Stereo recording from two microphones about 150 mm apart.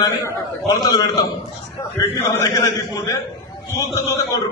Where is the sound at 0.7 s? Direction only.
25° left (ahead or behind).